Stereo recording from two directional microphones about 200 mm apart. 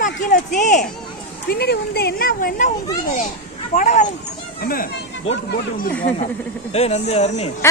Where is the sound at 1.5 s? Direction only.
55° left (ahead or behind).